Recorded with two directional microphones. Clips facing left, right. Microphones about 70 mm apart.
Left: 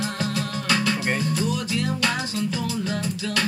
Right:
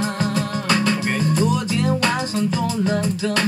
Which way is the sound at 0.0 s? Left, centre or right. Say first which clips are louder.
Right 5 dB; right.